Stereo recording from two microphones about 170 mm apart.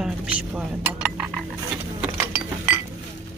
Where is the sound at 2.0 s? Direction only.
10° right (ahead or behind).